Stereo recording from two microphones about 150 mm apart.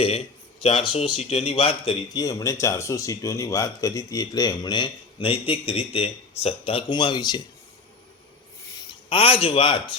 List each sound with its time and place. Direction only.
0.6 s speech: 40° left (ahead or behind)
2.1 s speech: 20° left (ahead or behind)
9.0 s speech: 35° left (ahead or behind)